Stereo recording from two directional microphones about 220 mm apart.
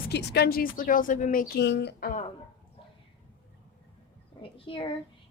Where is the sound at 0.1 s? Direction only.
50° left (ahead or behind).